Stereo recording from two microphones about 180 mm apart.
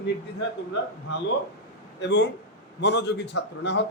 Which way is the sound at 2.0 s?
75° left (ahead or behind).